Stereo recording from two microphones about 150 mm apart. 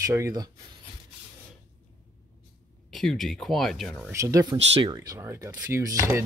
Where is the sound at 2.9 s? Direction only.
Centre (ahead or behind).